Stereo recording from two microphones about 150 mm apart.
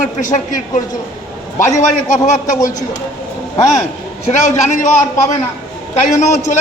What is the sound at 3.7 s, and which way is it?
A man's voice, 50° left (ahead or behind).